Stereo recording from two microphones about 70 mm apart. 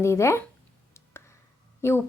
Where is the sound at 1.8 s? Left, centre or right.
Left.